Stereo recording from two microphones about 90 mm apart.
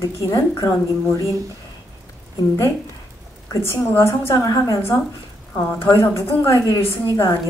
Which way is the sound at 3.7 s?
30° left (ahead or behind).